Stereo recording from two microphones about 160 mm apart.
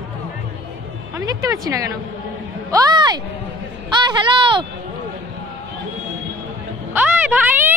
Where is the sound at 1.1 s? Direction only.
20° right (ahead or behind).